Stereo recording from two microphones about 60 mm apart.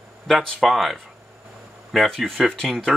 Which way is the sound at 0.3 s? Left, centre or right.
Centre.